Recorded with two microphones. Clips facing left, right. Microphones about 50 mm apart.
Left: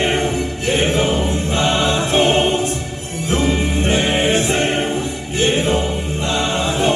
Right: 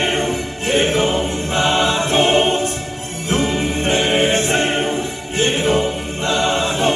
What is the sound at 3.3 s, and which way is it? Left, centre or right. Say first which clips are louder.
Music: left 1 dB; right.